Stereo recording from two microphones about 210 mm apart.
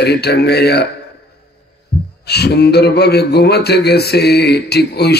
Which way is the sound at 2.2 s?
50° left (ahead or behind).